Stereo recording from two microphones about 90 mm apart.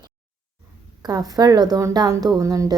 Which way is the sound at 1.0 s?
45° right (ahead or behind).